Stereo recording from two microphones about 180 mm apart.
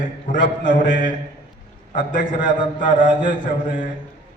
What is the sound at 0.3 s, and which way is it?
A man's voice, 50° left (ahead or behind).